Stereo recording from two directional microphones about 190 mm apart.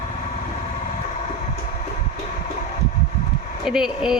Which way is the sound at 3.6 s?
5° right (ahead or behind).